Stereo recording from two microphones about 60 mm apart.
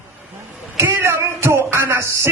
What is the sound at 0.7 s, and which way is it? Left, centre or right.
A man's voice, right.